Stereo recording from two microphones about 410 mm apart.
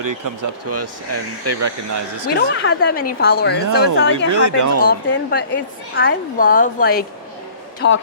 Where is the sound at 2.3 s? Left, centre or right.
Left.